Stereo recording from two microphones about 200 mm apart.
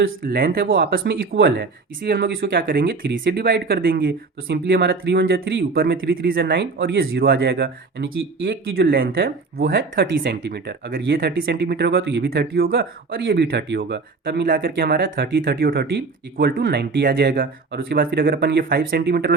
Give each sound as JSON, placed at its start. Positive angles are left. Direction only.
{"t": 0.3, "sound": "speech", "side_deg": -50}